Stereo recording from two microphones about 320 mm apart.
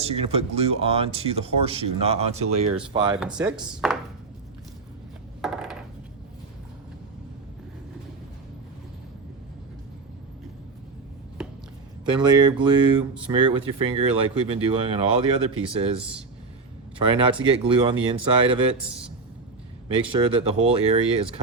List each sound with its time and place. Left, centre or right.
0.0 s speech: centre
3.2 s speech: centre
5.4 s a sound: centre
12.3 s speech: centre
17.0 s speech: centre
19.9 s speech: centre